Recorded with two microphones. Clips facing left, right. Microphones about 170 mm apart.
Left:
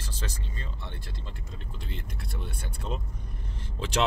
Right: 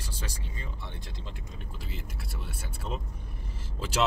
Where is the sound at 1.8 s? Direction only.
5° right (ahead or behind).